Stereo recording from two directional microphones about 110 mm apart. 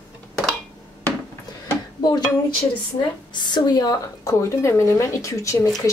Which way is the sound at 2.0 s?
40° left (ahead or behind).